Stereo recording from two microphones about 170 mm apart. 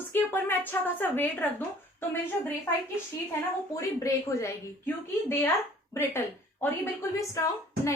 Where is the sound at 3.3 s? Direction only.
15° left (ahead or behind).